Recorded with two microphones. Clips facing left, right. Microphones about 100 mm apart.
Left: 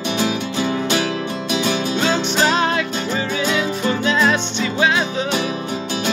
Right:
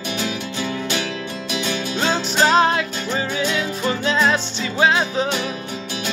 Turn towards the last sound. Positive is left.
turn(degrees=-35)  # may be behind; listen again after turning